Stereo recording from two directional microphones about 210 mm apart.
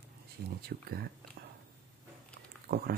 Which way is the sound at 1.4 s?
50° right (ahead or behind).